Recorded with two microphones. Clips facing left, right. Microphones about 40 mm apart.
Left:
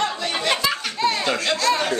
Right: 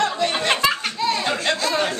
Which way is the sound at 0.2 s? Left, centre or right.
Right.